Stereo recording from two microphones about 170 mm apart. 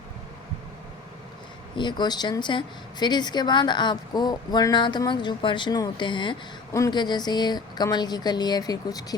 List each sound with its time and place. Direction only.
1.7 s a woman's voice: 25° left (ahead or behind)